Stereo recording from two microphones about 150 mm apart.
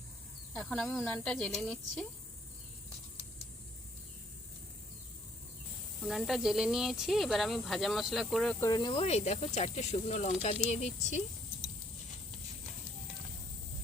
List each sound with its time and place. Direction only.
0.5 s speech: 5° left (ahead or behind)
6.1 s speech: centre (ahead or behind)
8.6 s speech: 25° left (ahead or behind)
8.9 s speech: 45° left (ahead or behind)